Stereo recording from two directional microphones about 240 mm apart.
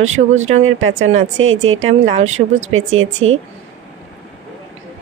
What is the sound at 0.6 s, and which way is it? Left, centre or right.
Speech, right.